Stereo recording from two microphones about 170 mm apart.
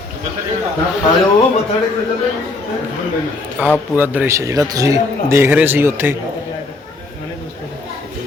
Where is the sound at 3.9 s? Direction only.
10° right (ahead or behind).